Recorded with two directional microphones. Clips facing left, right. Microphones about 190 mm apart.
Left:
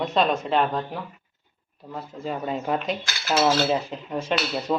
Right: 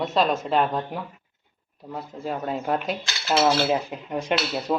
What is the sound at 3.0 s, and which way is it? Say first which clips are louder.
Cutlery: right 1 dB; 20° right (ahead or behind).